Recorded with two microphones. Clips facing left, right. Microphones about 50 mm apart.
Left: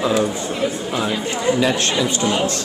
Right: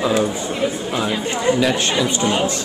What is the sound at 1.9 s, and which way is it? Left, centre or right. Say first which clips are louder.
Speech: right 1 dB; right.